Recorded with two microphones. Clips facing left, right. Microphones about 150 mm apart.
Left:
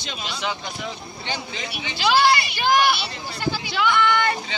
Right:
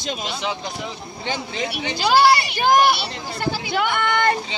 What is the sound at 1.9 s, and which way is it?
Speech, 35° right (ahead or behind).